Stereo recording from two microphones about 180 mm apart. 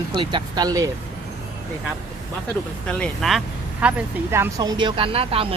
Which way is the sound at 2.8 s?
5° left (ahead or behind).